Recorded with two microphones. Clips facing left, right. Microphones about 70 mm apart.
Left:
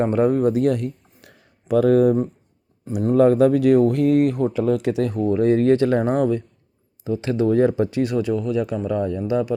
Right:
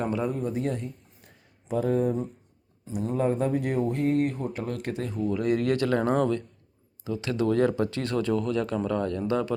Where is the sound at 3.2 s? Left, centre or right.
Left.